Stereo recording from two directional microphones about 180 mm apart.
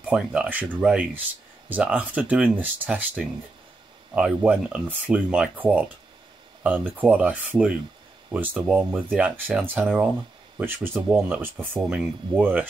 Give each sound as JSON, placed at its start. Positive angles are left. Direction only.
{"t": 0.0, "sound": "speech", "side_deg": -5}